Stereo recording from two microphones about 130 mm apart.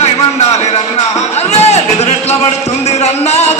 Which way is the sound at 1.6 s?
55° left (ahead or behind).